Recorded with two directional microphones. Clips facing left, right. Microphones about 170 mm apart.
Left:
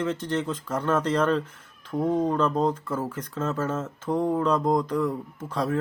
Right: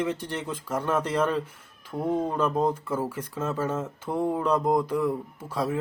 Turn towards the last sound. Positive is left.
turn(degrees=-10)  # may be behind; listen again after turning